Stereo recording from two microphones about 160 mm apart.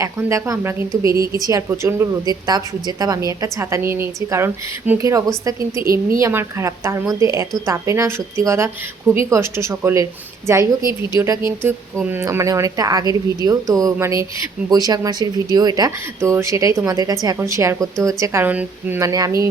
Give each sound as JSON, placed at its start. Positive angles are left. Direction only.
{"t": 0.0, "sound": "a woman's voice", "side_deg": -20}
{"t": 5.8, "sound": "a woman's voice", "side_deg": -65}
{"t": 6.1, "sound": "a woman's voice", "side_deg": -20}
{"t": 12.1, "sound": "a woman's voice", "side_deg": -15}